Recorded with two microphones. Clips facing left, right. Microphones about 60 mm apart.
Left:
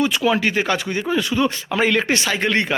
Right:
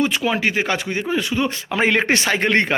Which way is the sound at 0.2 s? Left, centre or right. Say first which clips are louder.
Left 2 dB; centre.